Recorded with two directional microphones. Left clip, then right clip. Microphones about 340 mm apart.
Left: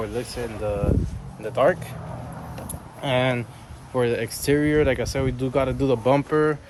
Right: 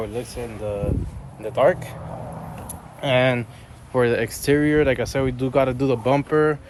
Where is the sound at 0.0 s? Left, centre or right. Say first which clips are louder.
Even; centre.